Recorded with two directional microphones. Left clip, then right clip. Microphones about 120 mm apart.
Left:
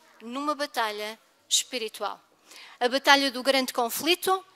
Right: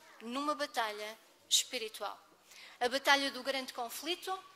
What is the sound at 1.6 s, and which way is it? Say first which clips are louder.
A woman's voice: left 8 dB; 35° left (ahead or behind).